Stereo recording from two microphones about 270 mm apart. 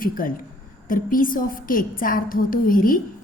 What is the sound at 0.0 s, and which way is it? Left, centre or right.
A woman's voice, left.